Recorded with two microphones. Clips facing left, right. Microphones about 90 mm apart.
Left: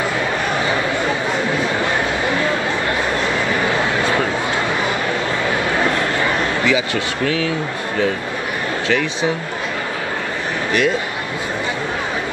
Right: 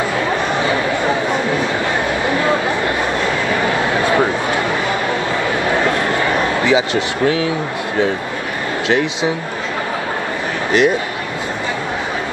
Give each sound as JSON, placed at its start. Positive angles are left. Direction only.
{"t": 6.6, "sound": "speech", "side_deg": -20}
{"t": 8.8, "sound": "speech", "side_deg": -20}
{"t": 10.7, "sound": "a man's voice", "side_deg": -20}